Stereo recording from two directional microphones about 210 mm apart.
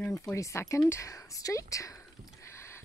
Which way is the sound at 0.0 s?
10° left (ahead or behind).